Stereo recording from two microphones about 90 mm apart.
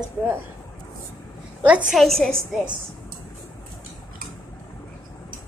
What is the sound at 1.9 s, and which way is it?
Speech, 5° left (ahead or behind).